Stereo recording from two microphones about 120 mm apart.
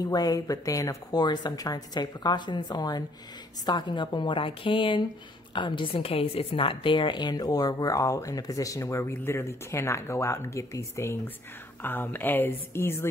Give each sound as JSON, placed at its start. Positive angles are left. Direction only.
{"t": 0.0, "sound": "a woman's voice", "side_deg": 35}